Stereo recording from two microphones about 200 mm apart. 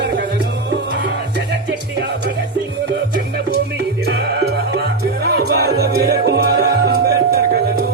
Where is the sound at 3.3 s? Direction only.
55° right (ahead or behind).